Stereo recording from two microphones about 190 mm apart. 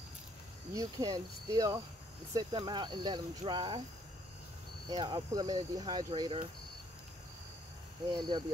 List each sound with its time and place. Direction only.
0.7 s speech: 20° right (ahead or behind)
4.8 s speech: 20° right (ahead or behind)
8.1 s speech: 25° right (ahead or behind)